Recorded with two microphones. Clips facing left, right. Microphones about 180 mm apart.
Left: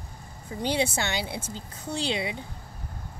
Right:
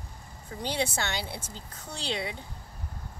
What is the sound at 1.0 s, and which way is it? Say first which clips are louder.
Speech: left 4 dB; 20° left (ahead or behind).